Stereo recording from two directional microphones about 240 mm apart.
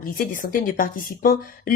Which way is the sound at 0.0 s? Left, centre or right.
Left.